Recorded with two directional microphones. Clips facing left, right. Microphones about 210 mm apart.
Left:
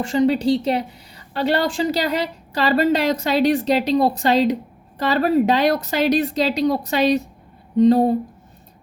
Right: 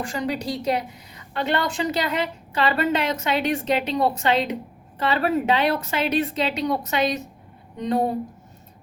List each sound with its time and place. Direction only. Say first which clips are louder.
0.0 s a woman's voice: left 9 dB; 25° left (ahead or behind)